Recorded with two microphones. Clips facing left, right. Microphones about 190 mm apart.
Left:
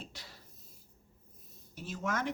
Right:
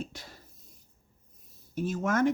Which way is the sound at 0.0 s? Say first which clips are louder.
Right 9 dB; 50° right (ahead or behind).